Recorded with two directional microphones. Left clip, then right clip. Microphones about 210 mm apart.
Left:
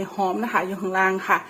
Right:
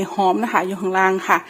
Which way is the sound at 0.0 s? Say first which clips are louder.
Right 6 dB; 35° right (ahead or behind).